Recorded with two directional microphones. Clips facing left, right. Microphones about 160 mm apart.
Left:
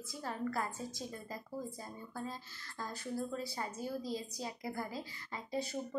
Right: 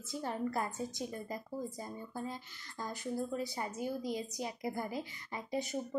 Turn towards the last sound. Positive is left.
turn(degrees=-15)  # may be behind; listen again after turning